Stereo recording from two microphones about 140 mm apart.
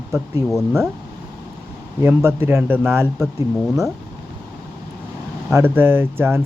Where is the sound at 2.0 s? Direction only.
15° right (ahead or behind).